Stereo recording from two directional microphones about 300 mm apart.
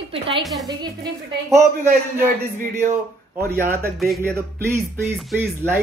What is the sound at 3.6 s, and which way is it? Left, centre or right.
Speech, centre.